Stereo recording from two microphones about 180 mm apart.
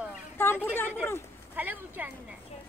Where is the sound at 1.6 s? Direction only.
10° right (ahead or behind).